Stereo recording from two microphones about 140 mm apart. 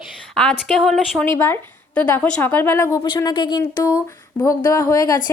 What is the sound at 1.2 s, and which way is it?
A woman's voice, 15° left (ahead or behind).